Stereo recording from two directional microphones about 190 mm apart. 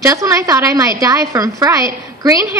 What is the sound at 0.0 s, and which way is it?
A woman's voice, 15° right (ahead or behind).